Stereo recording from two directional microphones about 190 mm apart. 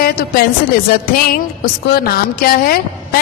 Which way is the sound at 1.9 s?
50° left (ahead or behind).